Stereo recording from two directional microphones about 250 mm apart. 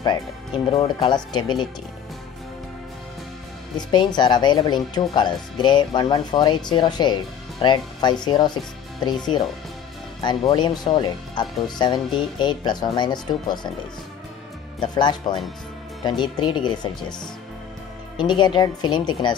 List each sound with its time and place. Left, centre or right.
0.7 s speech: centre
3.7 s speech: centre
14.8 s speech: centre
18.1 s speech: centre